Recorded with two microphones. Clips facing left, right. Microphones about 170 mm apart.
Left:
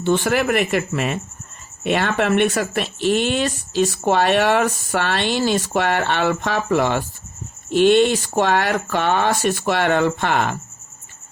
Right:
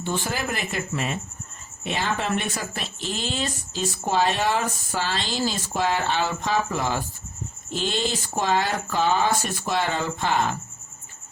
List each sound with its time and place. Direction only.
0.0 s speech: 70° left (ahead or behind)